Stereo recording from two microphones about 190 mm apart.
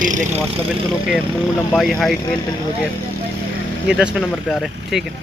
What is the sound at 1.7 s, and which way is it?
Speech, centre (ahead or behind).